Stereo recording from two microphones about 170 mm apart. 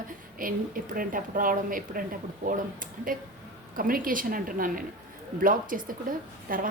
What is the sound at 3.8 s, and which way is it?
A woman's voice, 55° right (ahead or behind).